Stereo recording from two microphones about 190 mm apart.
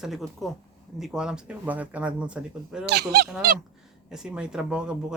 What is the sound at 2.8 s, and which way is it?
Speech, 60° right (ahead or behind).